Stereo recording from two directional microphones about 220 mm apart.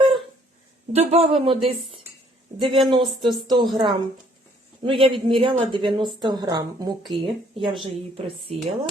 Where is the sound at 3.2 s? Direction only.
20° right (ahead or behind).